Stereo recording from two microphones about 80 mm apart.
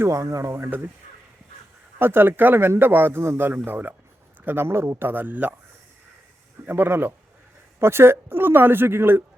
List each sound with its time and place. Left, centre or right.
0.1 s speech: right
2.0 s a man's voice: right
6.7 s a man's voice: right